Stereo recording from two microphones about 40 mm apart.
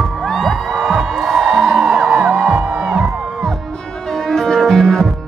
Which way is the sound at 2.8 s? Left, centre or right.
Right.